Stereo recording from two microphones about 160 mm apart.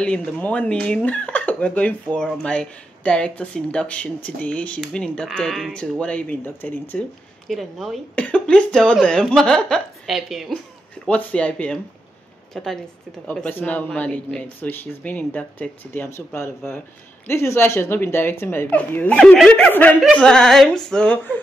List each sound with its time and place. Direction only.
0.0 s speech: 5° left (ahead or behind)